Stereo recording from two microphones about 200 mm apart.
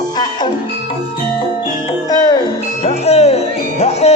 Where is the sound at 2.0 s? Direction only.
20° left (ahead or behind).